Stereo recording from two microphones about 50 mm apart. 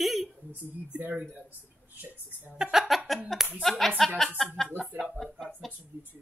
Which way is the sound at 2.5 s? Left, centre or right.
Centre.